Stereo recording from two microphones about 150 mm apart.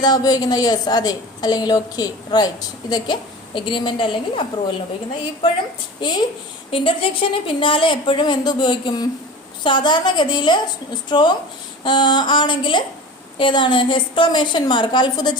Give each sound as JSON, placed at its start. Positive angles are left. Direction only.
{"t": 0.0, "sound": "a woman's voice", "side_deg": 25}
{"t": 6.0, "sound": "a woman's voice", "side_deg": 30}